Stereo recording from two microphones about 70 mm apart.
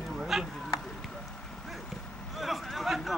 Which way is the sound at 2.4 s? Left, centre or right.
Centre.